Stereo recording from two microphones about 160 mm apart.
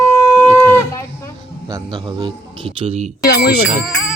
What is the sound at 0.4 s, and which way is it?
Shofar, 10° left (ahead or behind).